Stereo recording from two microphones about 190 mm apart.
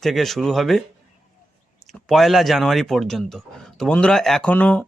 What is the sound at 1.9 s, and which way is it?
Speech, centre (ahead or behind).